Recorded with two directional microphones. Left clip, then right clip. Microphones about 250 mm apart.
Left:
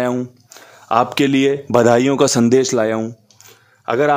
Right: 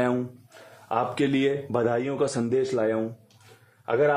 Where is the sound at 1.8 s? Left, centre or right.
Left.